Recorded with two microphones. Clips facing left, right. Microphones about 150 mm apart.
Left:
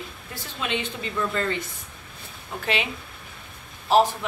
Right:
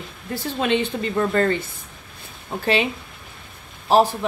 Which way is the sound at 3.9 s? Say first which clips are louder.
Right 2 dB; 35° right (ahead or behind).